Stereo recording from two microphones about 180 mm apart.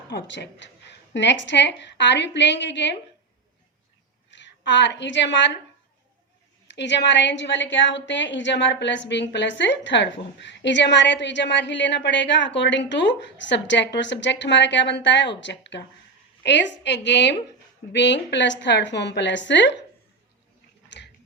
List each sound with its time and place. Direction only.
0.1 s a woman's voice: 75° left (ahead or behind)
4.3 s a woman's voice: 80° left
6.7 s a woman's voice: 75° left (ahead or behind)
20.9 s a sound: 80° left